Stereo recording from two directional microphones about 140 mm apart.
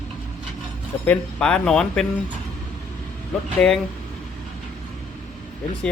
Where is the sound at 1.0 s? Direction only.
10° left (ahead or behind).